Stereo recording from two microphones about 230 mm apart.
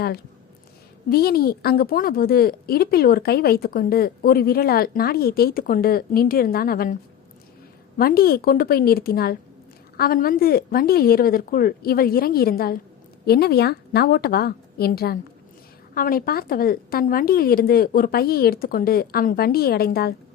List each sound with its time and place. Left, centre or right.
1.1 s a woman's voice: left
7.9 s a woman's voice: left